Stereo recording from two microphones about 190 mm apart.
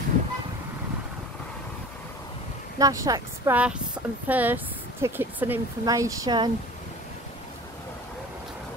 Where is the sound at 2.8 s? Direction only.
20° right (ahead or behind).